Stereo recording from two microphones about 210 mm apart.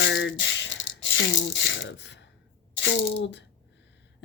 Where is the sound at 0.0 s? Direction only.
60° left (ahead or behind).